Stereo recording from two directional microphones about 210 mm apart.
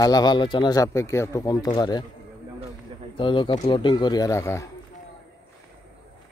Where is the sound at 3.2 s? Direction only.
25° left (ahead or behind).